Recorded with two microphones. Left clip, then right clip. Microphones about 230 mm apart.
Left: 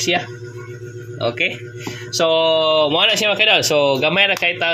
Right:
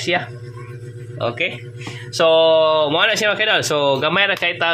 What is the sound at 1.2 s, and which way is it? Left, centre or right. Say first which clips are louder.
Speech: left 2 dB; centre.